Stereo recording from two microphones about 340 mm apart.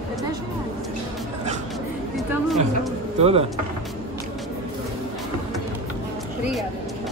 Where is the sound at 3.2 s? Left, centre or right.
Centre.